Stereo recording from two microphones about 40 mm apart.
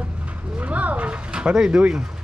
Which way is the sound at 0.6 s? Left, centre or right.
Right.